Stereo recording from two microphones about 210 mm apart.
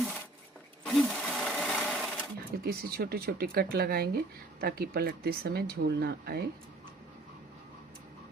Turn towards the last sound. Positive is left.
turn(degrees=-50)  # may be behind; listen again after turning